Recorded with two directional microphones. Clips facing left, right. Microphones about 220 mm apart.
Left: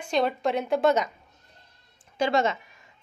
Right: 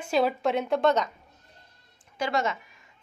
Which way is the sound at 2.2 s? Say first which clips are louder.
Left 4 dB; 25° left (ahead or behind).